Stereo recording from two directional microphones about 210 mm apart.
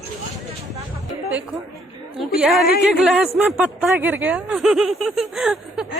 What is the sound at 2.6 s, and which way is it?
Speech, 50° left (ahead or behind).